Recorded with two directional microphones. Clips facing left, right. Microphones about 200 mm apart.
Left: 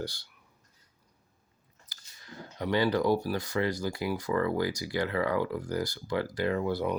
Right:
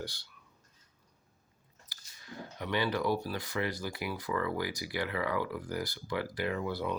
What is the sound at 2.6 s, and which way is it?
Speech, 35° left (ahead or behind).